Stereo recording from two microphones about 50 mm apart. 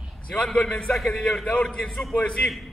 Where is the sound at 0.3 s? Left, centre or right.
Centre.